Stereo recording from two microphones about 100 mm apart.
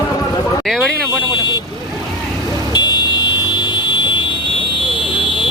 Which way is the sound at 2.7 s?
45° left (ahead or behind).